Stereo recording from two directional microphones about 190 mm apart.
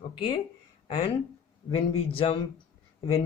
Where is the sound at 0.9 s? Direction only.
30° left (ahead or behind).